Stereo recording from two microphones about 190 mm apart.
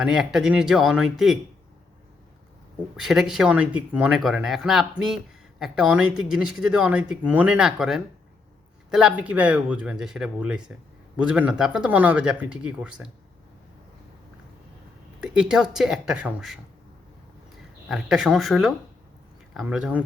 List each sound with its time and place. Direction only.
0.0 s speech: centre (ahead or behind)
2.9 s speech: centre (ahead or behind)
15.2 s speech: 5° right (ahead or behind)
17.8 s speech: centre (ahead or behind)